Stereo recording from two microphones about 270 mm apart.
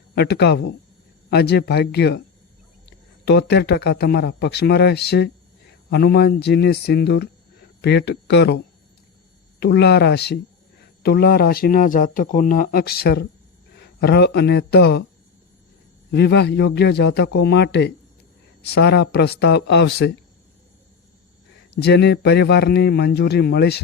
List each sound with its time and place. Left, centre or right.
0.1 s speech: left
3.2 s speech: left
9.6 s speech: left
16.1 s speech: left
21.8 s speech: left